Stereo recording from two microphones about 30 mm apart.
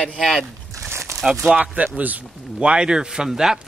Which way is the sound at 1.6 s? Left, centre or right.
Right.